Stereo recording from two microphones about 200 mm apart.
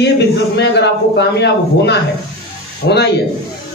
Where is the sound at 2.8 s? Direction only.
60° left (ahead or behind).